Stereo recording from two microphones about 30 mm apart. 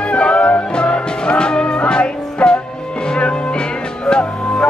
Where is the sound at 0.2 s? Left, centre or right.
Left.